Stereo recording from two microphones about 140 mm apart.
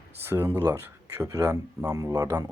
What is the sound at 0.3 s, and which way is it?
Speech, 20° right (ahead or behind).